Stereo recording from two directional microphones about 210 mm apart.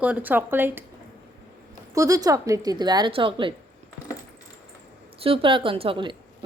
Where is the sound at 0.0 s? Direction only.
10° right (ahead or behind).